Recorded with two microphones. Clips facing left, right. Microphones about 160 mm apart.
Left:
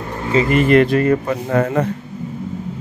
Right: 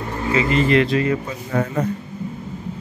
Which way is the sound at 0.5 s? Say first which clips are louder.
Left 5 dB; 55° left (ahead or behind).